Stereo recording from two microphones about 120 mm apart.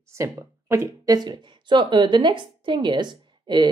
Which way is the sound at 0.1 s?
25° right (ahead or behind).